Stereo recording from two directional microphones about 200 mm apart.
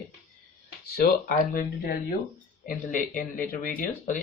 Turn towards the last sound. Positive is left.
turn(degrees=40)  # may be behind; listen again after turning